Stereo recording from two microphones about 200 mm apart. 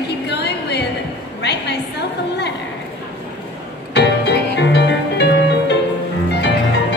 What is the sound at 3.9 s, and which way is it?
Music, 55° left (ahead or behind).